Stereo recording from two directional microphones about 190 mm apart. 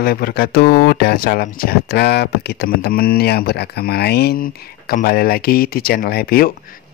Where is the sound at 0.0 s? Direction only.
55° left (ahead or behind).